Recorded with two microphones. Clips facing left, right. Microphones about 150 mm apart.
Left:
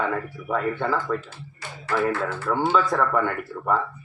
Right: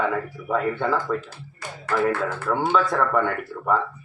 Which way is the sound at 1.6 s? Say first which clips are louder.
Right 1 dB; 50° right (ahead or behind).